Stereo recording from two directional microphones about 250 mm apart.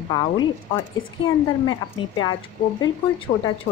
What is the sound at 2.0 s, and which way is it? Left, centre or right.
Speech, centre.